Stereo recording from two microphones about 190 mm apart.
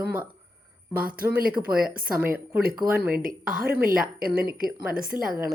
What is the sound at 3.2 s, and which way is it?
Speech, 45° right (ahead or behind).